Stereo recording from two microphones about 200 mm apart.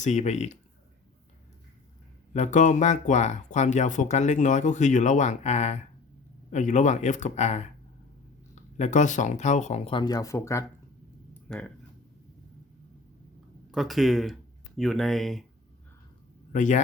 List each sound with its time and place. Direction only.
0.0 s speech: 35° left (ahead or behind)
2.3 s speech: 35° left (ahead or behind); by 11.7 s 5° left (ahead or behind)
13.7 s speech: centre (ahead or behind)
16.5 s a man's voice: 40° left (ahead or behind)